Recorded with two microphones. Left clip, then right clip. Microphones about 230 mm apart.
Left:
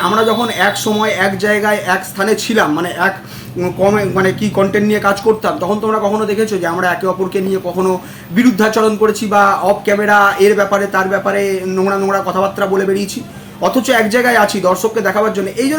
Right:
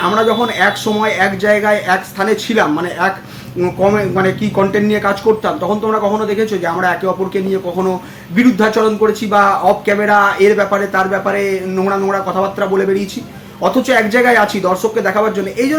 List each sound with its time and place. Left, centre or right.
0.1 s speech: centre
8.4 s speech: centre